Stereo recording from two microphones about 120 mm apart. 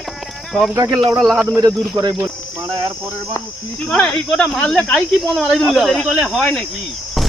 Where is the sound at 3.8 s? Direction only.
10° left (ahead or behind).